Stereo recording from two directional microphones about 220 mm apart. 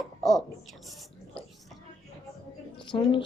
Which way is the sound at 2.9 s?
20° left (ahead or behind).